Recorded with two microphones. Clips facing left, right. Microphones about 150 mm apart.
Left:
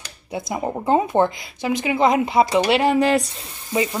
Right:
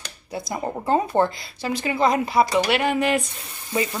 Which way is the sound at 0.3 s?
20° left (ahead or behind).